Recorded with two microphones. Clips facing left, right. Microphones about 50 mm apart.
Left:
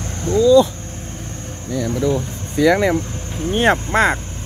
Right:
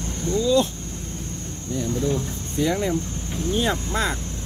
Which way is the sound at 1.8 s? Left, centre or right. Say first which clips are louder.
Left 5 dB; left.